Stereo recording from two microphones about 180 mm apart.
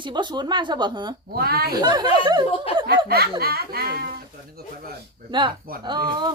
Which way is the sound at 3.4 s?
60° right (ahead or behind).